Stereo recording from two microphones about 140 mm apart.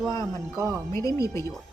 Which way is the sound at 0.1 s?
20° left (ahead or behind).